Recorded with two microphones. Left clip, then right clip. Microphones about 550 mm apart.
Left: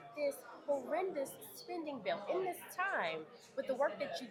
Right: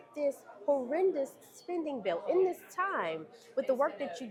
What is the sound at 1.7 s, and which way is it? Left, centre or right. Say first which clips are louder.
A woman's voice: right 6 dB; right.